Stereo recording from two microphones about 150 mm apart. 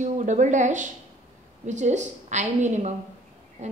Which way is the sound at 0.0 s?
55° right (ahead or behind).